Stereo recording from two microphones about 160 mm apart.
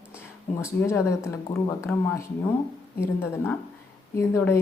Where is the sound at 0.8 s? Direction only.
15° left (ahead or behind).